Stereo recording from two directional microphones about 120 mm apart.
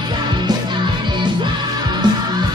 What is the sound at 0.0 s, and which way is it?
Music, 40° right (ahead or behind).